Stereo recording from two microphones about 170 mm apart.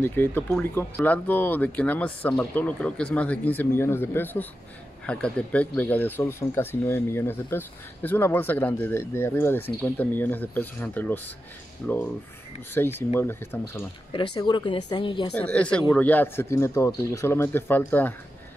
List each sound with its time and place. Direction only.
0.0 s speech: 10° left (ahead or behind)
14.1 s speech: 25° left (ahead or behind)
15.3 s speech: 5° left (ahead or behind)